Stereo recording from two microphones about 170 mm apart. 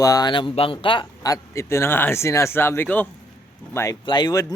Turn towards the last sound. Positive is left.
turn(degrees=20)  # may be behind; listen again after turning